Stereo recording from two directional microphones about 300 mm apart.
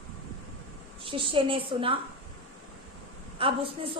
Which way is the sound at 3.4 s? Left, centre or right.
Centre.